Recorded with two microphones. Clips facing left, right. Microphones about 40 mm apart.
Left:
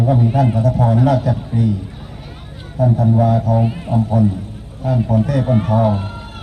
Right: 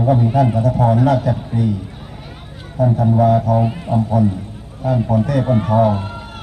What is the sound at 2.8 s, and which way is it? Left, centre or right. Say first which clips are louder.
Speech: even; centre.